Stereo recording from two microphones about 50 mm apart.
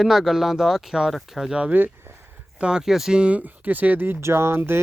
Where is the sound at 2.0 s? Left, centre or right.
Right.